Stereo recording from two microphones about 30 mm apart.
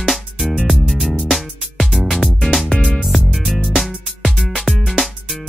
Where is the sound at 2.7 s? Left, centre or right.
Centre.